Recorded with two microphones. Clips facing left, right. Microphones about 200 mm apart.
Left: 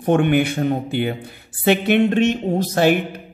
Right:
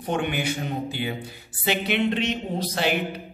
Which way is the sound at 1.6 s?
55° left (ahead or behind).